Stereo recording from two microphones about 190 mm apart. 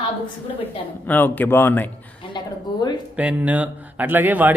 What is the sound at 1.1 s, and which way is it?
Speech, 10° left (ahead or behind).